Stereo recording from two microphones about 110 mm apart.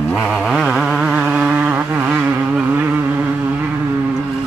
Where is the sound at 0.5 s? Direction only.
5° right (ahead or behind).